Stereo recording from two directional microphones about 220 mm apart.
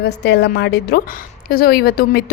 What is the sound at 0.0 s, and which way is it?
A woman's voice, 50° left (ahead or behind).